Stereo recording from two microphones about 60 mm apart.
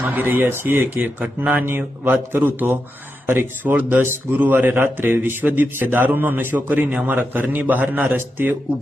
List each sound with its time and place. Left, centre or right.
0.0 s a man's voice: right
4.0 s a man's voice: right